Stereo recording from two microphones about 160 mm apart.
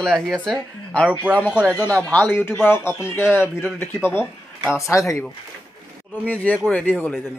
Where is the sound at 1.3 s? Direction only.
10° right (ahead or behind).